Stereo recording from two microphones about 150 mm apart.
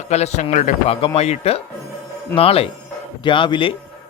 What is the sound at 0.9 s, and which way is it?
A man's voice, 45° left (ahead or behind).